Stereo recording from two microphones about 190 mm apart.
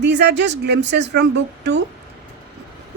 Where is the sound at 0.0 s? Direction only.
65° right (ahead or behind).